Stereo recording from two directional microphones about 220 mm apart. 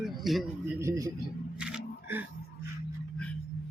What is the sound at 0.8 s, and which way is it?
Speech, 15° right (ahead or behind).